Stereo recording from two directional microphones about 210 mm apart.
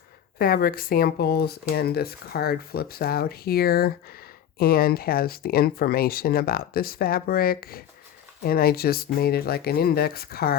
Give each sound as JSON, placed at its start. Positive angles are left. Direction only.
{"t": 0.3, "sound": "speech", "side_deg": 45}